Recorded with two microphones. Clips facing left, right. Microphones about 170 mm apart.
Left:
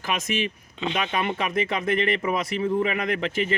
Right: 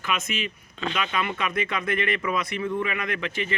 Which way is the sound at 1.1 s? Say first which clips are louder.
Left 2 dB; 35° left (ahead or behind).